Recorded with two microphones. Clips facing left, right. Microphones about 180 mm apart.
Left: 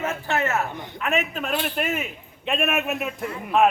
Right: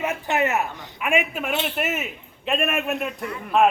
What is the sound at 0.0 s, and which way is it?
A man's voice, 15° right (ahead or behind).